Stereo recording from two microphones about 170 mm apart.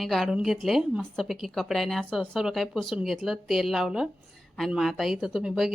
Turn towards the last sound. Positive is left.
turn(degrees=-5)  # may be behind; listen again after turning